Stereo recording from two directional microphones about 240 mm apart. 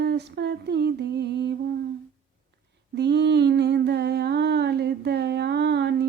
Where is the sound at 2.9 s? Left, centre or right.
Right.